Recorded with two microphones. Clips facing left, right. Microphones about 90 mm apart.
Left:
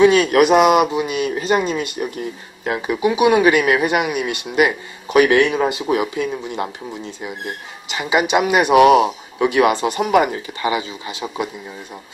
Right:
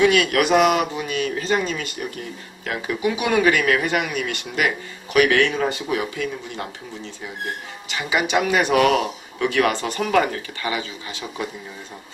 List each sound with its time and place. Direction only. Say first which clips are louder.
0.0 s speech: left 5 dB; 25° left (ahead or behind)